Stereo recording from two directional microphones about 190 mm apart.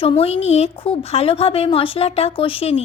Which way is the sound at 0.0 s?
30° left (ahead or behind).